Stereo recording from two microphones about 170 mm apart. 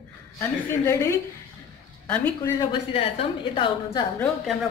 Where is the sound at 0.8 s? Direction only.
15° left (ahead or behind).